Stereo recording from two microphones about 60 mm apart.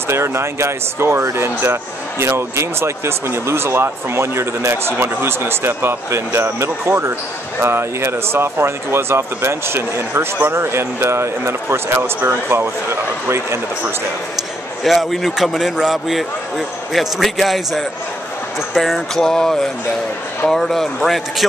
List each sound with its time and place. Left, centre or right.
0.1 s speech: right
14.8 s speech: centre